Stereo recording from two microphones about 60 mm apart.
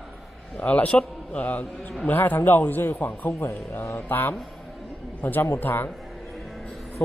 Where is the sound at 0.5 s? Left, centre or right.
Left.